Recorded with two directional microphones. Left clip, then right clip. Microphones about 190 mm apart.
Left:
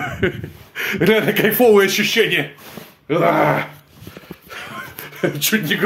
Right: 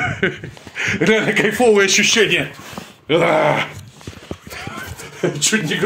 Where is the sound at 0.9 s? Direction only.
45° left (ahead or behind).